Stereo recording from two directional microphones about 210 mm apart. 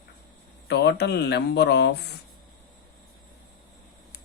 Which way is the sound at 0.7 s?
55° left (ahead or behind).